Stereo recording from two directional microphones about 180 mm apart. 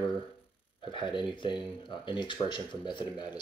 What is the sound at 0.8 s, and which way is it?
Speech, 25° left (ahead or behind).